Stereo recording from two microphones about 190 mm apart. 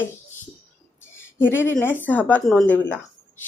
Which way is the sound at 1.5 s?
10° left (ahead or behind).